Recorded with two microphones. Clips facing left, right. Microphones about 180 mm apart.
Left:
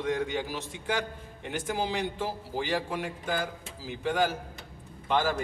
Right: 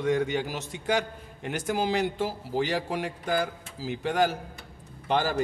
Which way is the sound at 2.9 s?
40° right (ahead or behind).